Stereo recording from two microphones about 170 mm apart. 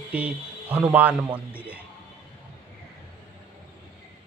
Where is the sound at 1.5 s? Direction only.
10° right (ahead or behind).